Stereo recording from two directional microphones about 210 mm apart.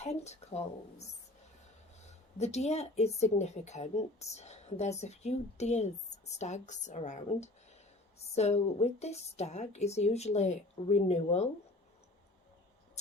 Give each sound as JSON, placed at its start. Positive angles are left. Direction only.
{"t": 0.0, "sound": "speech", "side_deg": 30}
{"t": 2.4, "sound": "speech", "side_deg": 30}